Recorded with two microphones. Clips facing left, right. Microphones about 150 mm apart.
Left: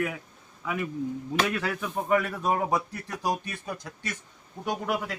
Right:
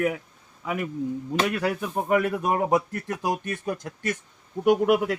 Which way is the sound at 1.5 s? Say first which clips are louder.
Right 4 dB; 45° right (ahead or behind).